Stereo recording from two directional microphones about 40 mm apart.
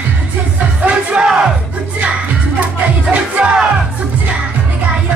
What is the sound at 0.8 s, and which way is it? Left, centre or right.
Music, right.